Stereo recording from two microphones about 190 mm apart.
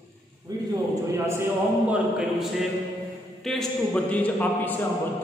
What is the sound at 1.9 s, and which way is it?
A man's voice, 5° right (ahead or behind).